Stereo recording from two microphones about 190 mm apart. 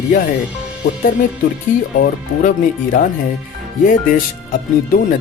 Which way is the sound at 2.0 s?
45° left (ahead or behind).